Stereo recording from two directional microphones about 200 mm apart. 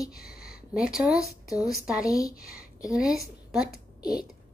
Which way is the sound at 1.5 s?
15° left (ahead or behind).